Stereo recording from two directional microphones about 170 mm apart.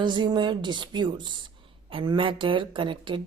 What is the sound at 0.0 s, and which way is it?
A woman's voice, 25° right (ahead or behind).